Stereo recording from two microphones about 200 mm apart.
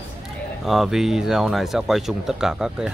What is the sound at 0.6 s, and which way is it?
Speech, centre (ahead or behind).